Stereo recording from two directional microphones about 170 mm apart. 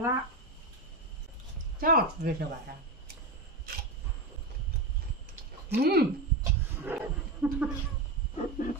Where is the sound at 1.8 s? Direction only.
60° right (ahead or behind).